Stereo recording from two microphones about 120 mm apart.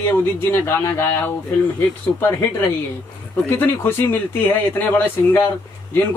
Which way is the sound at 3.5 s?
20° left (ahead or behind).